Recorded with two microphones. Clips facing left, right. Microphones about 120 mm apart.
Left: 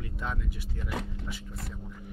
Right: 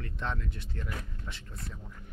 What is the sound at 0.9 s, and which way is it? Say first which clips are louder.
Speech: left 6 dB; 80° left.